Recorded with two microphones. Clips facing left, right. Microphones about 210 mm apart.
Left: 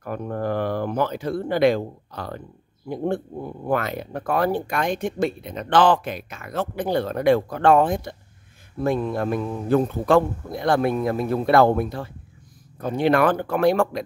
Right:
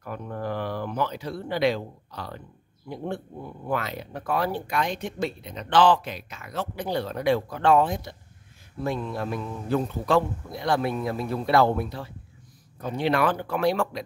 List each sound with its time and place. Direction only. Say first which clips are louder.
0.0 s speech: left 6 dB; 50° left (ahead or behind)